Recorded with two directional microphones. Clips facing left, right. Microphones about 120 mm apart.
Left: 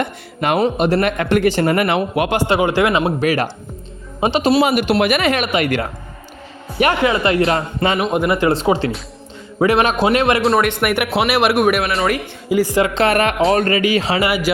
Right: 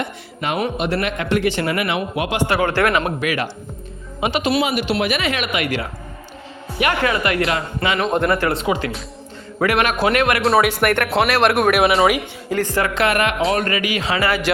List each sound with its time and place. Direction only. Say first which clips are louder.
0.0 s speech: left 5 dB; 55° left (ahead or behind)
0.6 s a man's voice: left 5 dB; 40° left (ahead or behind); by 2.3 s 55° left (ahead or behind)
2.5 s speech: left 1 dB; 15° left (ahead or behind)
3.2 s speech: left 5 dB; 40° left (ahead or behind)
4.6 s a man's voice: left 5 dB; 50° left (ahead or behind)
5.5 s speech: left 5 dB; 35° left (ahead or behind)
7.0 s a man's voice: left 4 dB; 25° left (ahead or behind)
7.9 s speech: right 2 dB; 10° left (ahead or behind)
8.3 s a man's voice: left 3 dB; 20° left (ahead or behind)
8.5 s a man's voice: left 4 dB; 30° left (ahead or behind)
10.4 s speech: even; centre (ahead or behind)
12.5 s speech: left 5 dB; 10° left (ahead or behind)
12.8 s speech: left 3 dB; 25° left (ahead or behind)
14.2 s speech: left 2 dB; 10° left (ahead or behind)